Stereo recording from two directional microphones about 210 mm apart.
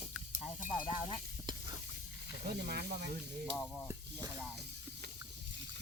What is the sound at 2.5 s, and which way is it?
Speech, 50° right (ahead or behind).